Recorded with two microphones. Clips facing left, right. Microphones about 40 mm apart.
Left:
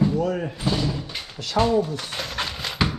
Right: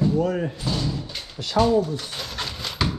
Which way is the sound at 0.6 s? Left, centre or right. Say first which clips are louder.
Left 2 dB; left.